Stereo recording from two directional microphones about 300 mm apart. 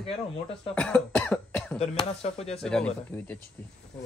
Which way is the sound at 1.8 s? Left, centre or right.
Centre.